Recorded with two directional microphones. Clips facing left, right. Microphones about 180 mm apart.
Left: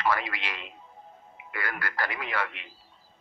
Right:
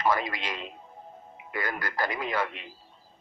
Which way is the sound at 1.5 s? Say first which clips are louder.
Right 2 dB; 20° right (ahead or behind).